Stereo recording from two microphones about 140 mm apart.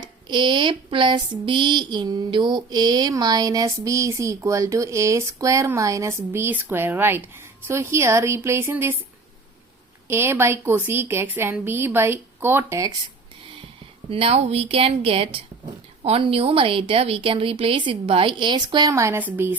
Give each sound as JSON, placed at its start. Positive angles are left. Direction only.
{"t": 0.0, "sound": "speech", "side_deg": -30}
{"t": 10.1, "sound": "a woman's voice", "side_deg": -20}
{"t": 14.1, "sound": "a woman's voice", "side_deg": -45}